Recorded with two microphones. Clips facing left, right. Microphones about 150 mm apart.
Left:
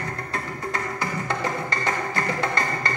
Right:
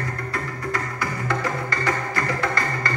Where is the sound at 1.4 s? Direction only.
25° left (ahead or behind).